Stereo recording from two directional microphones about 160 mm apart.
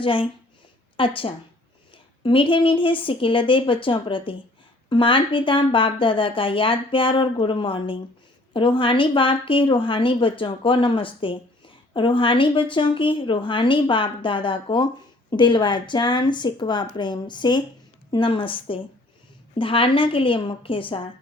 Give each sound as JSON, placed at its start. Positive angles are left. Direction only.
{"t": 0.0, "sound": "a woman's voice", "side_deg": 35}